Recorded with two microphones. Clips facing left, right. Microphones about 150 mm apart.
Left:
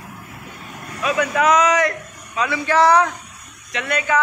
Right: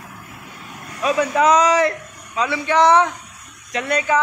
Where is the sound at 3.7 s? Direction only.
35° right (ahead or behind).